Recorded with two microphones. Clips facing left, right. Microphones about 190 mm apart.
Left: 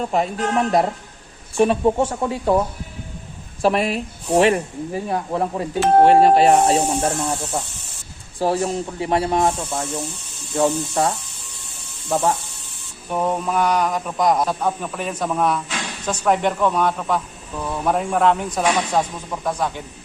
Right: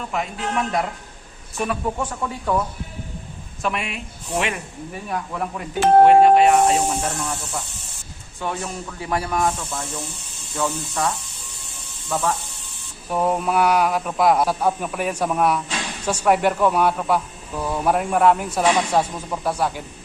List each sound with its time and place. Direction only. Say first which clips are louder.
0.0 s speech: left 6 dB; 35° left (ahead or behind)
13.1 s speech: right 1 dB; 5° right (ahead or behind)